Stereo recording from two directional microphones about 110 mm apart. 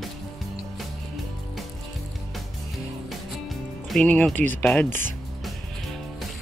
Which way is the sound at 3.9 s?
10° left (ahead or behind).